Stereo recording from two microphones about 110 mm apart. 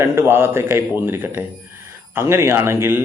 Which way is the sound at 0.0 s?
20° right (ahead or behind).